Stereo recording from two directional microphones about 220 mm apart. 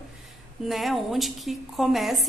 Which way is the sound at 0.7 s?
Centre (ahead or behind).